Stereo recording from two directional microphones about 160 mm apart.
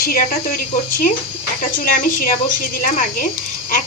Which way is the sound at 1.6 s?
60° left (ahead or behind).